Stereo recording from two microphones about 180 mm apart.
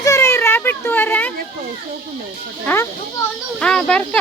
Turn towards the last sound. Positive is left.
turn(degrees=5)  # may be behind; listen again after turning